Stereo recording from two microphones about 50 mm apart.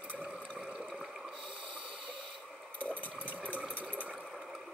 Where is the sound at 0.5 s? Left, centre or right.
Right.